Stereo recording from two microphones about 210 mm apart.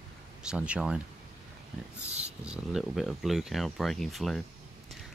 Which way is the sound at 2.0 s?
30° right (ahead or behind).